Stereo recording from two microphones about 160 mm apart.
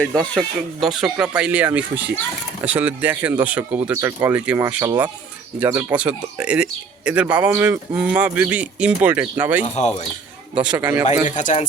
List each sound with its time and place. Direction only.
0.2 s speech: centre (ahead or behind)
9.7 s a man's voice: 45° left (ahead or behind)
10.5 s speech: 5° right (ahead or behind)
11.0 s a man's voice: 50° left (ahead or behind)